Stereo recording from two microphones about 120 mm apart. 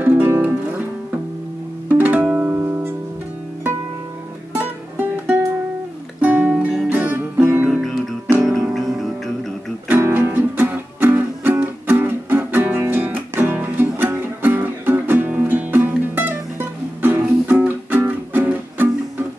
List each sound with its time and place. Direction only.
0.0 s music: 15° right (ahead or behind)
1.9 s music: 15° right (ahead or behind)
4.6 s music: 15° right (ahead or behind)
8.5 s music: centre (ahead or behind)
9.8 s music: 15° right (ahead or behind)